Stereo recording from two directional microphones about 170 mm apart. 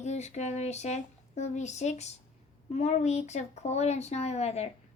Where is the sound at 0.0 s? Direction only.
40° left (ahead or behind).